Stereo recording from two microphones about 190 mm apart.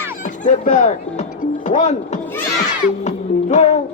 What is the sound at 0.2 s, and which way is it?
Music, 40° left (ahead or behind).